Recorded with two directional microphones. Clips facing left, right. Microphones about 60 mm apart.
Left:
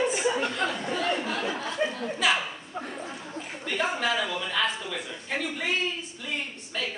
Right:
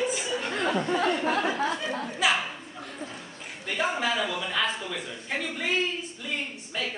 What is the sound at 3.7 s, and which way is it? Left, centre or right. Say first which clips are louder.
Speech: even; centre.